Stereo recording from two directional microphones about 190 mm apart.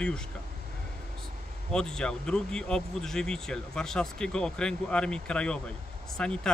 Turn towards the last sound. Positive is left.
turn(degrees=5)  # may be behind; listen again after turning